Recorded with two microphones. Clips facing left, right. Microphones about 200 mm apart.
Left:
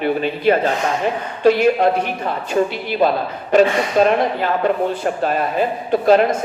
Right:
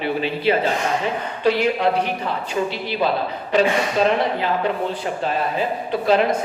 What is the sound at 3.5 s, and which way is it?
A man's voice, 45° left (ahead or behind).